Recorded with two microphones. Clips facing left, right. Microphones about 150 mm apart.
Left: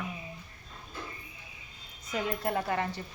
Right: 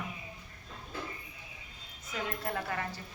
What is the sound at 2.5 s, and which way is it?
Speech, 25° left (ahead or behind).